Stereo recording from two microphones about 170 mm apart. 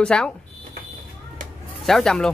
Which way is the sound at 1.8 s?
Centre (ahead or behind).